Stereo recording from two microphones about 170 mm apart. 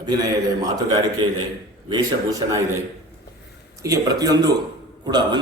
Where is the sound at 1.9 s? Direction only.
20° right (ahead or behind).